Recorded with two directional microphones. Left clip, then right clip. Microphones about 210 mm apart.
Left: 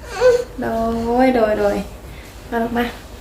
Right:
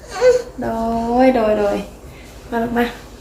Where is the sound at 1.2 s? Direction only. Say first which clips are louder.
Right 1 dB; 10° right (ahead or behind).